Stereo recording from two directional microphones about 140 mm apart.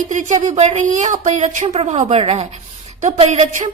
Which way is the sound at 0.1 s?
60° right (ahead or behind).